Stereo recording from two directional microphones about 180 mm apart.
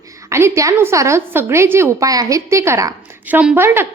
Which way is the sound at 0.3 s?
15° right (ahead or behind).